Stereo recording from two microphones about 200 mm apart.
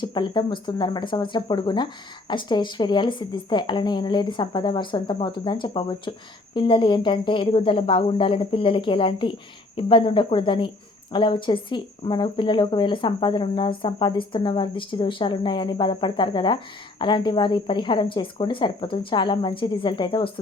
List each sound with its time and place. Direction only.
0.0 s speech: 20° left (ahead or behind)